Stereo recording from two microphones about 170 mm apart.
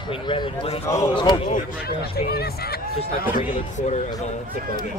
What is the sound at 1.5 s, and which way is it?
Speech, 65° left (ahead or behind).